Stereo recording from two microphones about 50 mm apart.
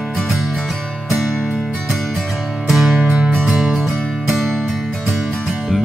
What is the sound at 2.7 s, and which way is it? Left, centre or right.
Music, centre.